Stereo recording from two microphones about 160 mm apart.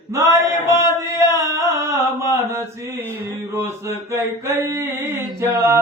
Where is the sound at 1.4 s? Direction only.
20° right (ahead or behind).